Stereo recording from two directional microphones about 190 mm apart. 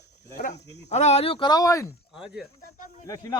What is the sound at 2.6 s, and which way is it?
Speech, 45° left (ahead or behind).